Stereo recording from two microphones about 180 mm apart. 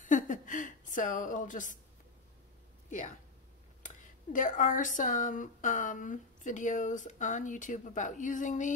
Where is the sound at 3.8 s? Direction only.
45° left (ahead or behind).